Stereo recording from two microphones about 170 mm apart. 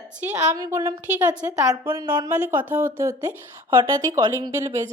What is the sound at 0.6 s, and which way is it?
Speech, 20° right (ahead or behind).